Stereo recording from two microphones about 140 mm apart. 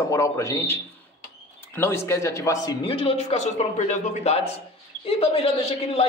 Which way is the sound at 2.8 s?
40° left (ahead or behind).